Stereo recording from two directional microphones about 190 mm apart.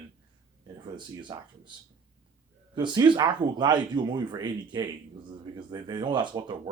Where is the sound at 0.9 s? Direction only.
25° right (ahead or behind).